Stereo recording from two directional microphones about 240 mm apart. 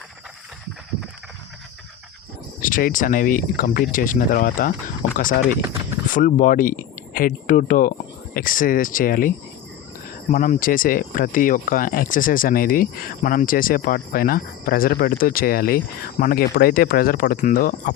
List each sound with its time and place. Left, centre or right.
2.6 s speech: left
6.1 s speech: left
10.3 s speech: left